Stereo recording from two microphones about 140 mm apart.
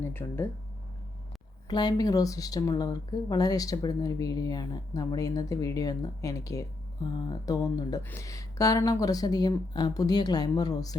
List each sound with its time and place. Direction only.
0.0 s speech: 15° left (ahead or behind)
1.6 s speech: 30° left (ahead or behind)